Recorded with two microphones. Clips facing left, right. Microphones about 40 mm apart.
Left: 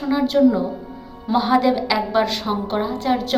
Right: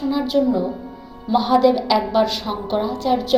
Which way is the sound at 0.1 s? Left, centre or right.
Centre.